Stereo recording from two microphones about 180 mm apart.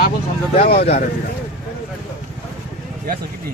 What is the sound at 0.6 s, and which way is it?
Speech, 60° left (ahead or behind).